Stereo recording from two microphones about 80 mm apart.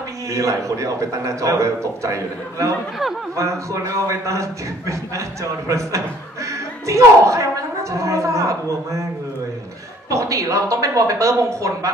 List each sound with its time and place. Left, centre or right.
0.3 s a man's voice: right
10.0 s speech: right